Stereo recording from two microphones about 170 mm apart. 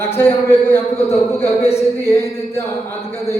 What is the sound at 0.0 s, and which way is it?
A man's voice, 15° left (ahead or behind).